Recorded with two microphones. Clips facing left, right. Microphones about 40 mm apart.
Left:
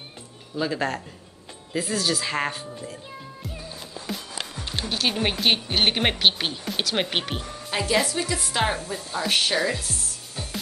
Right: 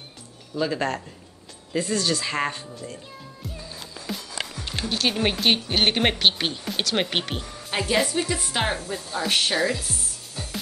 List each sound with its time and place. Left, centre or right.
0.6 s speech: centre
2.6 s speech: left
4.1 s music: centre
4.6 s speech: centre
7.7 s speech: centre